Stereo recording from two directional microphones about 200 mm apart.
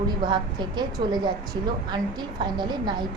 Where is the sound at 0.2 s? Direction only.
20° right (ahead or behind).